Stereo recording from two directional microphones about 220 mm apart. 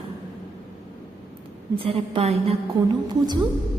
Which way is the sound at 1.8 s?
25° right (ahead or behind).